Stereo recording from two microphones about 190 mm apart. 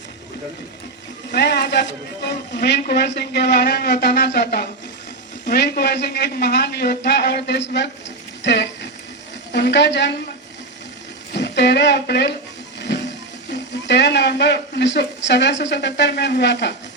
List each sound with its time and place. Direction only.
1.3 s a woman's voice: 60° left (ahead or behind)
11.3 s speech: 65° left (ahead or behind)
12.9 s music: 65° left (ahead or behind)
13.5 s a woman's voice: 65° left (ahead or behind)